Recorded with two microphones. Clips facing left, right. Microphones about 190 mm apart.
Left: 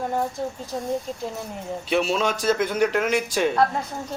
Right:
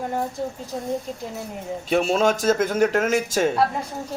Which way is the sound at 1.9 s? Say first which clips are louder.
Right 3 dB; 45° right (ahead or behind).